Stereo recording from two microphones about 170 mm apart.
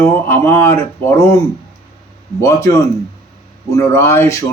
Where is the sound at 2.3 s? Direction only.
15° left (ahead or behind).